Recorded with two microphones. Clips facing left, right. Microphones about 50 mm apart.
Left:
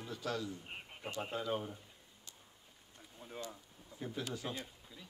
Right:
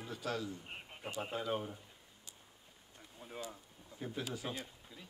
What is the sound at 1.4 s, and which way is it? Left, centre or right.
Speech, centre.